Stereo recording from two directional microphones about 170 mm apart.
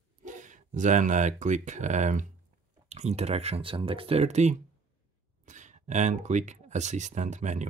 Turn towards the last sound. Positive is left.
turn(degrees=-45)  # may be behind; listen again after turning